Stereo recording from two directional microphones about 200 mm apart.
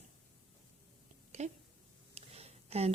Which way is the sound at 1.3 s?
35° right (ahead or behind).